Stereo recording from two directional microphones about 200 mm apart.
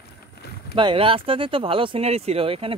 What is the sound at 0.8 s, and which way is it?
Speech, 25° right (ahead or behind).